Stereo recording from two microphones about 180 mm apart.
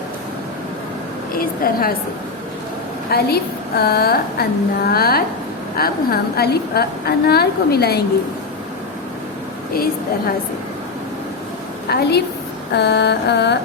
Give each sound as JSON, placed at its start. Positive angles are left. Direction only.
{"t": 1.4, "sound": "a woman's voice", "side_deg": 55}
{"t": 3.1, "sound": "a woman's voice", "side_deg": 60}
{"t": 11.9, "sound": "a woman's voice", "side_deg": 60}
{"t": 12.7, "sound": "mantra", "side_deg": 70}